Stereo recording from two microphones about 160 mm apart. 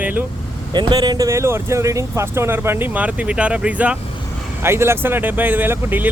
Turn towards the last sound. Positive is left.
turn(degrees=-15)  # may be behind; listen again after turning